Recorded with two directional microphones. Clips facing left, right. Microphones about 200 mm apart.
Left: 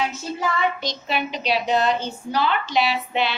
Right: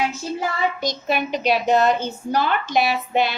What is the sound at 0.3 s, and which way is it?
A woman's voice, 45° right (ahead or behind).